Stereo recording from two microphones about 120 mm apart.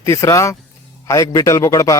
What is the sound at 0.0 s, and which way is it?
Speech, 25° left (ahead or behind).